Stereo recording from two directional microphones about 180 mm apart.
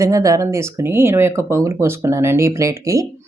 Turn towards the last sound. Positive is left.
turn(degrees=-15)  # may be behind; listen again after turning